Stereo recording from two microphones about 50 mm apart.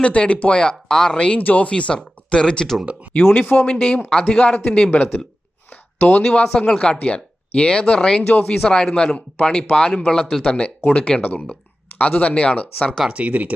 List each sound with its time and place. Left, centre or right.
0.0 s speech: left
3.4 s speech: left
3.7 s speech: centre
5.7 s a sound: left
6.5 s speech: centre
7.0 s speech: left
8.3 s speech: left
8.6 s speech: centre
11.2 s speech: left
13.1 s speech: right